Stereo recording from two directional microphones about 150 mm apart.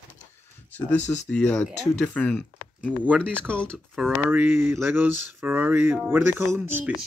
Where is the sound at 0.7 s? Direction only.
10° left (ahead or behind).